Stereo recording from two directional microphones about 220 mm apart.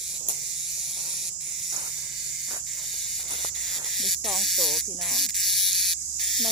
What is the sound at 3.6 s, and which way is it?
Cricket, centre (ahead or behind).